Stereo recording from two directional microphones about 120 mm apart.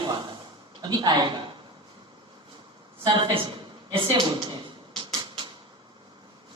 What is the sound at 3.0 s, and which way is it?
A man's voice, 40° right (ahead or behind).